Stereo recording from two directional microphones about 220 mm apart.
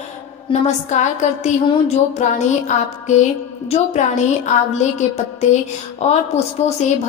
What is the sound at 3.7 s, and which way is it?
Speech, 30° left (ahead or behind).